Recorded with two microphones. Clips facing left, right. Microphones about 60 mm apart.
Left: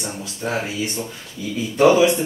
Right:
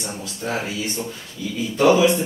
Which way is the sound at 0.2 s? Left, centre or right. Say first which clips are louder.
Left 1 dB; centre.